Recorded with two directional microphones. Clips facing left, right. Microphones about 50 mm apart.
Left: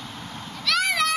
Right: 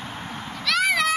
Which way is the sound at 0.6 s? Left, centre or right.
Centre.